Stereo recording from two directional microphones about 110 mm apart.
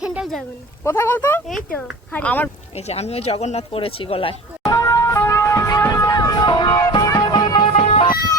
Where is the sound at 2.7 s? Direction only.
75° left (ahead or behind); by 4.3 s 55° left (ahead or behind).